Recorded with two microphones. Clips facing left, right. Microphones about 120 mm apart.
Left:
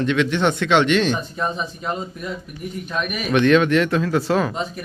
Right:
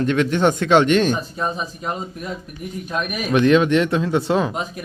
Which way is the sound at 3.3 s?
30° right (ahead or behind).